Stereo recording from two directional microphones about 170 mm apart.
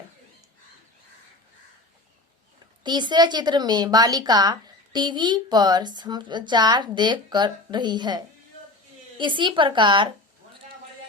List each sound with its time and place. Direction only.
2.8 s speech: 25° right (ahead or behind)